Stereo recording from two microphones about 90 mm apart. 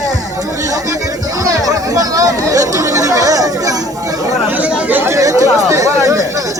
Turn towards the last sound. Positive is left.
turn(degrees=-40)  # may be behind; listen again after turning